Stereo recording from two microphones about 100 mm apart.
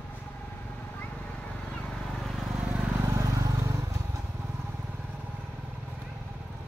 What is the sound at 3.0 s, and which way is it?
Vehicle, 35° right (ahead or behind).